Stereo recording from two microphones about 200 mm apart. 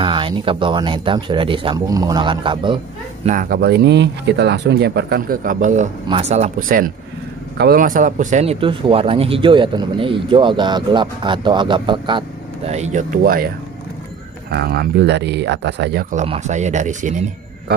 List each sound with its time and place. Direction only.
0.0 s speech: 25° right (ahead or behind)
3.3 s speech: 45° right (ahead or behind)
7.5 s speech: 50° right (ahead or behind)
14.5 s speech: 50° right (ahead or behind)